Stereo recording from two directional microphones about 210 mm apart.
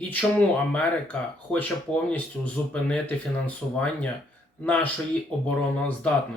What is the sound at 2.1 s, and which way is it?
Speech, 5° left (ahead or behind).